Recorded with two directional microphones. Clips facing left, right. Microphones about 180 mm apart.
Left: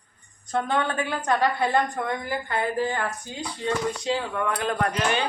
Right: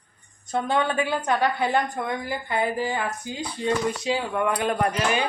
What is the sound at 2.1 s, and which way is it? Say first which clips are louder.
Speech: even; 15° right (ahead or behind).